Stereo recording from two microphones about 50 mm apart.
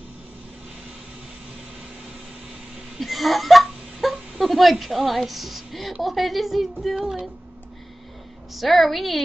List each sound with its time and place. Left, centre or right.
3.0 s speech: centre
8.5 s speech: centre